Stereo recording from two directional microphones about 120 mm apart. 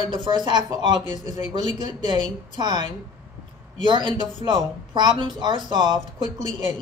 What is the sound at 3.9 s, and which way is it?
A woman's voice, 40° right (ahead or behind).